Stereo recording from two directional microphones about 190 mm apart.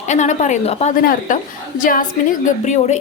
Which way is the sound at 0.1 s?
40° left (ahead or behind).